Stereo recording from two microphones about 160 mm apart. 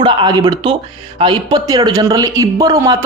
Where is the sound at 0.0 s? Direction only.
30° right (ahead or behind).